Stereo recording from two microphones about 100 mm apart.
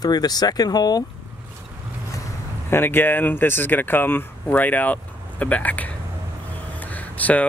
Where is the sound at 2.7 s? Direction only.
20° left (ahead or behind).